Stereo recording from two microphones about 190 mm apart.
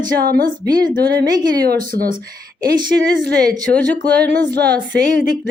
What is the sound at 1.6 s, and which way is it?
Speech, 50° right (ahead or behind).